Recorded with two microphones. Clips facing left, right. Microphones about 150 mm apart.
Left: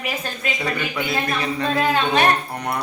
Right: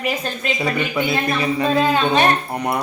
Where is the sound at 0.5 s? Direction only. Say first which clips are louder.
Right 5 dB; 10° right (ahead or behind).